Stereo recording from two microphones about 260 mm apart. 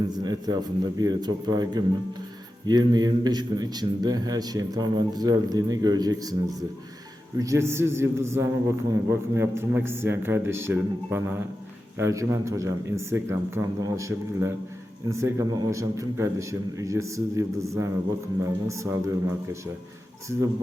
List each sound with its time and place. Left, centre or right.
0.1 s a man's voice: centre